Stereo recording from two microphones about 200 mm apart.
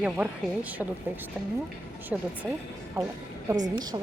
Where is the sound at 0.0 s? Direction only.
5° right (ahead or behind).